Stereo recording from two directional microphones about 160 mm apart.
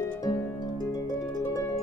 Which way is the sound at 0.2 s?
20° left (ahead or behind).